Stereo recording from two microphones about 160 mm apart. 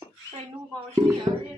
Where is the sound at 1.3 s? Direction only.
30° right (ahead or behind).